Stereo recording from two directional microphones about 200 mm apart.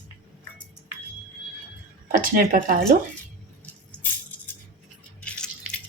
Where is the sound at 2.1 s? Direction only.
45° right (ahead or behind).